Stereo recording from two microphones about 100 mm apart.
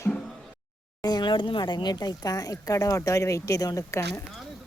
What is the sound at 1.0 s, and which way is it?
Speech, 45° left (ahead or behind).